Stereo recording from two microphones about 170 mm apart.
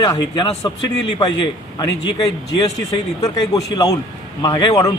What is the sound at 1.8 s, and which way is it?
A man's voice, 25° left (ahead or behind).